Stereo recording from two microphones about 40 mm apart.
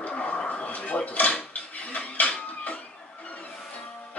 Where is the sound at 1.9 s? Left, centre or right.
Left.